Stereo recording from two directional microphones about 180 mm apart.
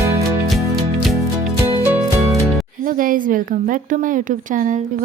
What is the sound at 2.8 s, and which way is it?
Speech, 50° right (ahead or behind).